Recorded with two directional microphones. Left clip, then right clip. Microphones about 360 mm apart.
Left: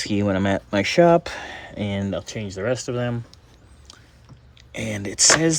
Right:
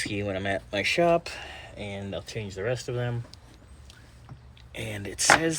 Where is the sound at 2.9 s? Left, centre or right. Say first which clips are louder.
Left 6 dB; left.